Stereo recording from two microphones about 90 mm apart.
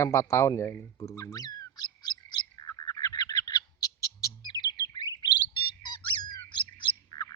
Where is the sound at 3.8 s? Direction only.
45° left (ahead or behind); by 7.1 s 60° left (ahead or behind).